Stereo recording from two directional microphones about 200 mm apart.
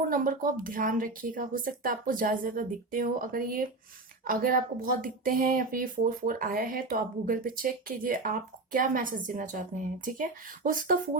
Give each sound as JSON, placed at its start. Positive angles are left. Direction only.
{"t": 0.1, "sound": "speech", "side_deg": -45}